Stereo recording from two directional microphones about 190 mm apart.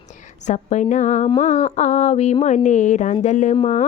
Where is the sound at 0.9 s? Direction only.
40° left (ahead or behind).